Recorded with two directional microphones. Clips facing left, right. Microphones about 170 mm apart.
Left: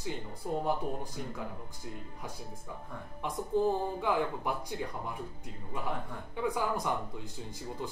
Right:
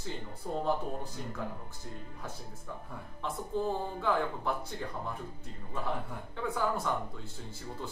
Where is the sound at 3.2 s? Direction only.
15° left (ahead or behind).